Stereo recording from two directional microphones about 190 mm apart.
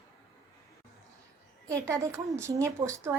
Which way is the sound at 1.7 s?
15° right (ahead or behind).